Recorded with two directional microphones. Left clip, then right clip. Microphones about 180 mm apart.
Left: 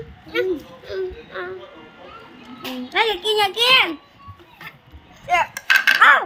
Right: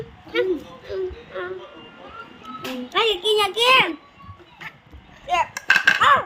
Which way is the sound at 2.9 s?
10° right (ahead or behind).